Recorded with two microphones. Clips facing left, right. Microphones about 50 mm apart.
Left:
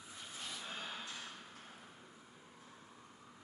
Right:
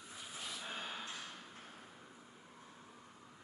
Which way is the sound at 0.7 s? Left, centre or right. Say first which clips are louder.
Right 2 dB; centre.